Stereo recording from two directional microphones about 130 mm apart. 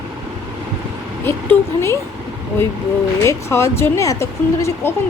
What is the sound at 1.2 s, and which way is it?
Speech, 20° left (ahead or behind).